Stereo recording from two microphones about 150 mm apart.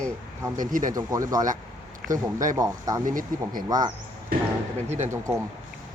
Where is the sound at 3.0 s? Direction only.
65° right (ahead or behind).